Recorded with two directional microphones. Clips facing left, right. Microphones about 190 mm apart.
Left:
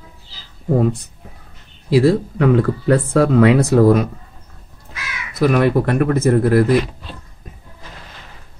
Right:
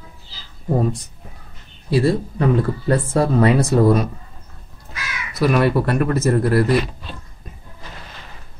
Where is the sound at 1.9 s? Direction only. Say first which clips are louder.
Left 4 dB; 90° left.